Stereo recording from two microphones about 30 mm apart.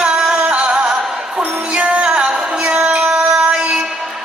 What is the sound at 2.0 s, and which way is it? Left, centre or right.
Music, right.